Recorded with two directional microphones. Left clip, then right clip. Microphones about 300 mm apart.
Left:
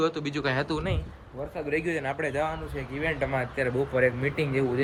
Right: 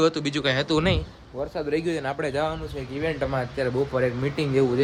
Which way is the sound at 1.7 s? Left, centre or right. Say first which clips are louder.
Right 1 dB; centre.